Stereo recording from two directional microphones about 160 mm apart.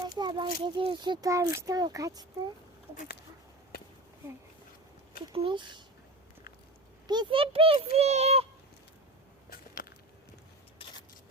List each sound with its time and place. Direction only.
0.2 s speech: 30° right (ahead or behind)
2.9 s speech: 55° left (ahead or behind)
3.7 s a sound: 80° left
5.3 s a child's voice: 35° right (ahead or behind)
7.1 s a child's voice: 30° right (ahead or behind)
9.8 s a sound: 60° left (ahead or behind)